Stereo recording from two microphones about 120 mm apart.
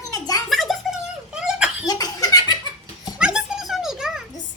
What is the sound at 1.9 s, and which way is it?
Laughter, 30° left (ahead or behind).